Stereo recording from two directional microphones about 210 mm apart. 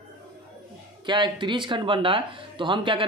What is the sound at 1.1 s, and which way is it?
Speech, 20° right (ahead or behind).